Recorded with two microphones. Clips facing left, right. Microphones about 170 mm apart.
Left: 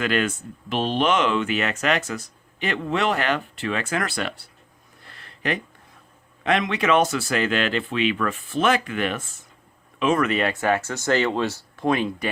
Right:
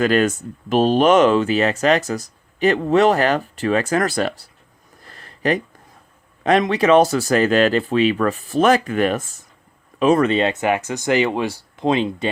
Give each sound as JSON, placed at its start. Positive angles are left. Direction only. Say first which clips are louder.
{"t": 0.0, "sound": "speech", "louder": "right 7 dB", "side_deg": -40}
{"t": 5.0, "sound": "a sound", "louder": "right 7 dB", "side_deg": -40}
{"t": 6.4, "sound": "speech", "louder": "right 6 dB", "side_deg": -40}